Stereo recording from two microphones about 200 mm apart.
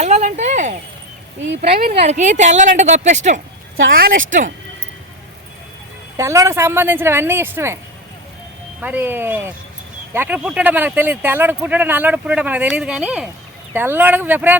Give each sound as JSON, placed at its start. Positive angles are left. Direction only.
{"t": 0.0, "sound": "a sound", "side_deg": -35}
{"t": 1.9, "sound": "speech", "side_deg": -35}
{"t": 6.1, "sound": "speech", "side_deg": -15}
{"t": 8.8, "sound": "speech", "side_deg": -10}